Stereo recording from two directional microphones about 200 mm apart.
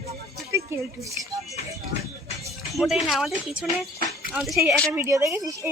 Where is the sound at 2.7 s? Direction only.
Centre (ahead or behind).